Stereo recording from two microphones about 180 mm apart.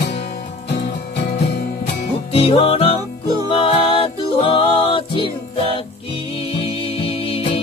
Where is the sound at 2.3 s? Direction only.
30° left (ahead or behind).